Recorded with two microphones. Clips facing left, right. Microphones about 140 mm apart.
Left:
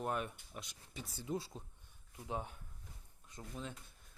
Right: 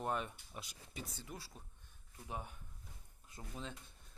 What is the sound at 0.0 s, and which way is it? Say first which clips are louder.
Speech: left 1 dB; 5° left (ahead or behind).